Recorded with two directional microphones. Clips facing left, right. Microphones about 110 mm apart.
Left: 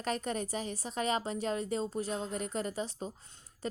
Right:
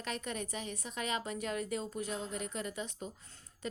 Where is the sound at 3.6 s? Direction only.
35° left (ahead or behind).